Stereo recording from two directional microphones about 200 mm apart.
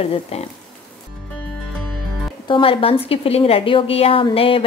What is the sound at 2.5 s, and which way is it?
A woman's voice, 25° left (ahead or behind).